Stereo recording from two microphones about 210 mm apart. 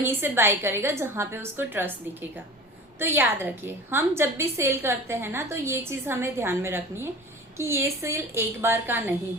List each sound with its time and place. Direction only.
0.0 s a woman's voice: 10° right (ahead or behind)
3.0 s a woman's voice: 10° right (ahead or behind)